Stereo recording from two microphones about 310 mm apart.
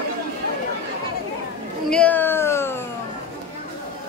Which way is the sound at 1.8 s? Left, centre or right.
Centre.